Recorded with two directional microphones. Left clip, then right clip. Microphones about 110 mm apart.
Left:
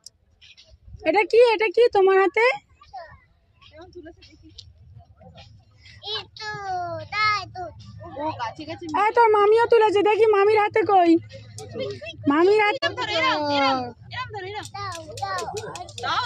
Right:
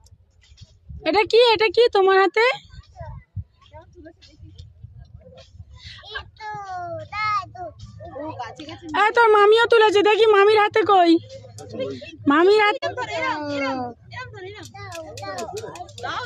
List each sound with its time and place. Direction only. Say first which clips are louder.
1.0 s speech: right 1 dB; 25° right (ahead or behind)
3.7 s a sound: left 2 dB; 35° right (ahead or behind)
6.3 s a child's voice: even; 5° left (ahead or behind)
8.4 s speech: left 3 dB; 35° right (ahead or behind)
12.9 s a child's voice: left 3 dB; 55° left (ahead or behind)
13.8 s speech: left 1 dB; 30° right (ahead or behind)
14.9 s a child's voice: left 1 dB; 15° left (ahead or behind)